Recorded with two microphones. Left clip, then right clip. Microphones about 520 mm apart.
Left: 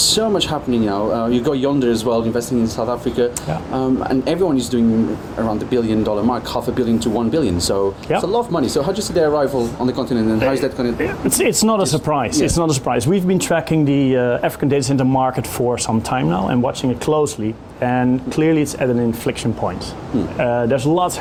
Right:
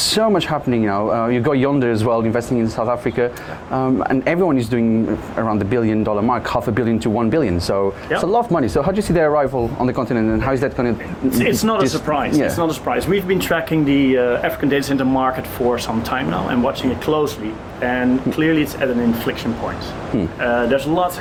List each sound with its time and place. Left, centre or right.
0.2 s speech: right
11.3 s speech: left
13.2 s speech: left
20.4 s speech: left